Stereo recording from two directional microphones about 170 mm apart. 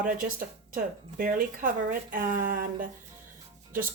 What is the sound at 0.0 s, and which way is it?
Speech, 55° right (ahead or behind).